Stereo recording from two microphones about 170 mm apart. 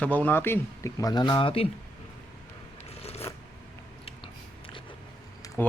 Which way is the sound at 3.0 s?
35° left (ahead or behind).